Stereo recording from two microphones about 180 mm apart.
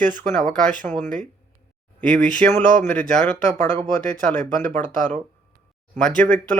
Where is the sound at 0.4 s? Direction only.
5° left (ahead or behind).